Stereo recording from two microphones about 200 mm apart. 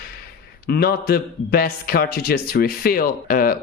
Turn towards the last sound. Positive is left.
turn(degrees=45)  # may be behind; listen again after turning